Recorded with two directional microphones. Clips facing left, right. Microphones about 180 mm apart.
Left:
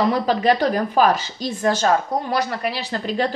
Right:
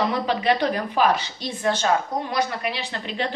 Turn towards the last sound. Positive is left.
turn(degrees=40)  # may be behind; listen again after turning